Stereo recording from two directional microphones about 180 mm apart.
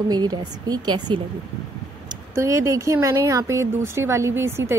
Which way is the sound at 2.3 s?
15° right (ahead or behind).